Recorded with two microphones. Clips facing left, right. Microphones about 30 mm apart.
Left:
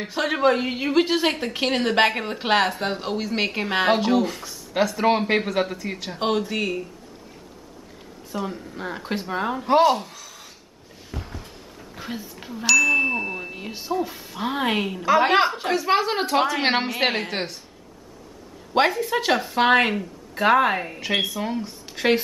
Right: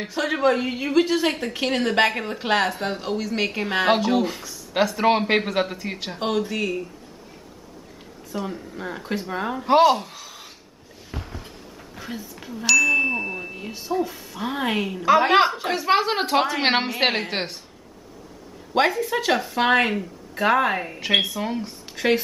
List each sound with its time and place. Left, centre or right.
0.1 s speech: centre
4.1 s speech: centre
6.1 s speech: centre
8.4 s speech: centre
9.7 s speech: centre
10.1 s a sound: centre
12.0 s a sound: centre
14.0 s speech: centre
15.7 s speech: centre
18.7 s speech: centre
21.9 s speech: centre